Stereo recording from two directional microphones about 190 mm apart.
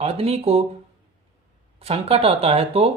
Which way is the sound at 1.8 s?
30° right (ahead or behind).